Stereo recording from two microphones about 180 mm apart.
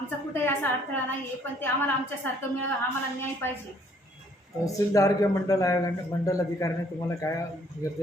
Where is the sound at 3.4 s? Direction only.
10° left (ahead or behind).